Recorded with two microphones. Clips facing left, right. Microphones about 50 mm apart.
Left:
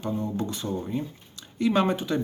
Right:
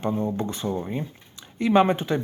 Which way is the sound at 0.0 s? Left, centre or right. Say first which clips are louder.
Right 3 dB; right.